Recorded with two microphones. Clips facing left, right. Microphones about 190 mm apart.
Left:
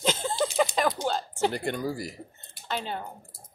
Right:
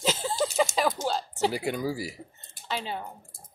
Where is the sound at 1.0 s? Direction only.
45° right (ahead or behind).